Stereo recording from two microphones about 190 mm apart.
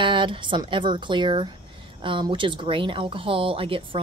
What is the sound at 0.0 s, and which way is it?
Speech, 25° right (ahead or behind).